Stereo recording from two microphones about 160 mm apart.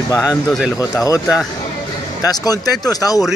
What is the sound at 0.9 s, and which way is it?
Speech, 20° left (ahead or behind).